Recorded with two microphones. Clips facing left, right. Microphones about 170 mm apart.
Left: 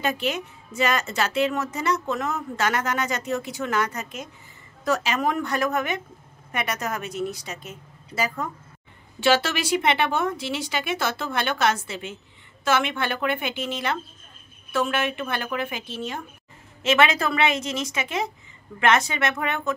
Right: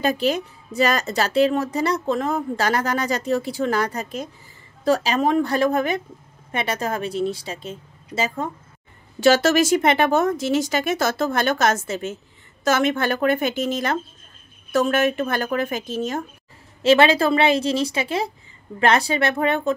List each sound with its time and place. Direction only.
0.0 s a woman's voice: 35° right (ahead or behind)
9.2 s a woman's voice: 40° right (ahead or behind)